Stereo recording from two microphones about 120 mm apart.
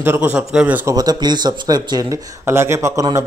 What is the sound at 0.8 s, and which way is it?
Speech, 35° right (ahead or behind).